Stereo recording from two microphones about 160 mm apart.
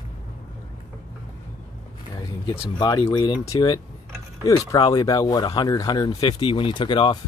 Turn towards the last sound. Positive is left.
turn(degrees=30)  # may be behind; listen again after turning